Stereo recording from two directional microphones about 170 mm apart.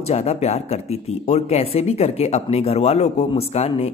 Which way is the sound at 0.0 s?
40° left (ahead or behind).